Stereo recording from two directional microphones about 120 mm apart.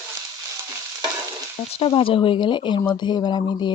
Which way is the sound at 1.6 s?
55° left (ahead or behind).